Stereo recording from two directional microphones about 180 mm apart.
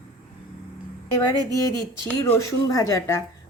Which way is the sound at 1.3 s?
20° left (ahead or behind).